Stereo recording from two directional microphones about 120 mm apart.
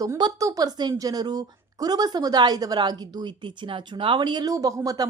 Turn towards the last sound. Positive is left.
turn(degrees=-30)  # may be behind; listen again after turning